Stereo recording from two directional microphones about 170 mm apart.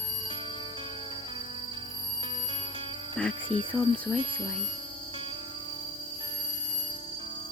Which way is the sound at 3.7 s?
25° left (ahead or behind).